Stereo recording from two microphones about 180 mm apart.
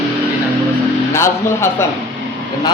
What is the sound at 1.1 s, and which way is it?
Speech, 15° left (ahead or behind).